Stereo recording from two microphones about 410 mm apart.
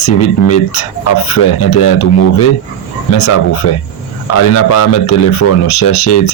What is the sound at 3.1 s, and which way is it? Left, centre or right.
Speech, left.